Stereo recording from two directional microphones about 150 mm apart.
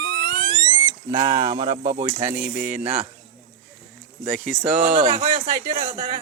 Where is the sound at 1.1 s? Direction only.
30° right (ahead or behind).